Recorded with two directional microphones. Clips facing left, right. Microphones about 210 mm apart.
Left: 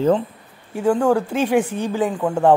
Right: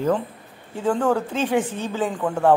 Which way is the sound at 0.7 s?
10° left (ahead or behind).